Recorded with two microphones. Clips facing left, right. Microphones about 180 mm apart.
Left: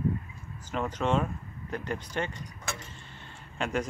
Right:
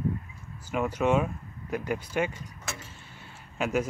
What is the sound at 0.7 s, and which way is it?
Speech, 10° right (ahead or behind).